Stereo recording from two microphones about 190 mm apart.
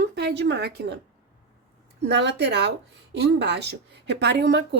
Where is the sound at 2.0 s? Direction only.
65° right (ahead or behind).